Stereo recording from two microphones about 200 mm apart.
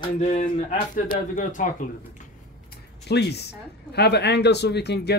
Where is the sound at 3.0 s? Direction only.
55° left (ahead or behind).